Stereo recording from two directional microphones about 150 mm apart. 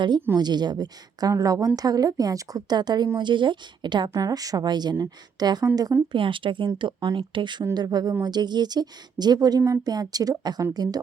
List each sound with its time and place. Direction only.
0.3 s a woman's voice: 30° right (ahead or behind)